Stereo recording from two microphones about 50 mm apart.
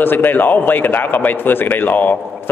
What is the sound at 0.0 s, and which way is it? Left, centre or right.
A man's voice, left.